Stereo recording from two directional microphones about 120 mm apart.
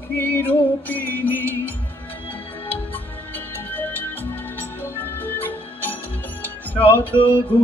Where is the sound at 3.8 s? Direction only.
15° left (ahead or behind).